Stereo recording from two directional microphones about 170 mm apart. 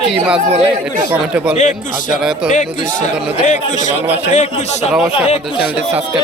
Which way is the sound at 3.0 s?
45° left (ahead or behind).